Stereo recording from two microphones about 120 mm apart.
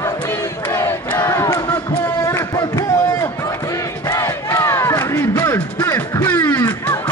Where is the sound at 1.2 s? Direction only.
30° left (ahead or behind).